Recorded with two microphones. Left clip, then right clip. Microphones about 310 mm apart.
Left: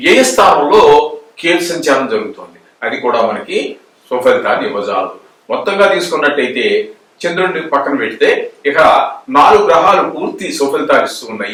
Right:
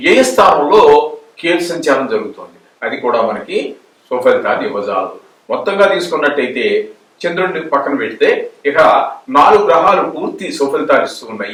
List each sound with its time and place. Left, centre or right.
0.3 s a man's voice: centre
1.4 s a man's voice: centre
10.3 s speech: centre